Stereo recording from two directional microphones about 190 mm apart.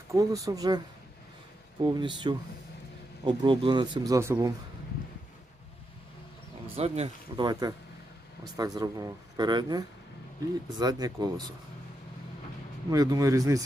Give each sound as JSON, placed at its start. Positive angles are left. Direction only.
{"t": 0.1, "sound": "speech", "side_deg": -15}
{"t": 1.8, "sound": "speech", "side_deg": -25}
{"t": 6.7, "sound": "speech", "side_deg": -35}
{"t": 8.5, "sound": "speech", "side_deg": -20}
{"t": 12.9, "sound": "speech", "side_deg": -20}